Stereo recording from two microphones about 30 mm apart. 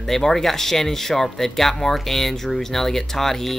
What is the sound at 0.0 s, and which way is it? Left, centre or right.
Speech, centre.